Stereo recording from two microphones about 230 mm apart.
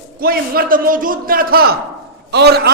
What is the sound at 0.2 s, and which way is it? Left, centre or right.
A man's voice, right.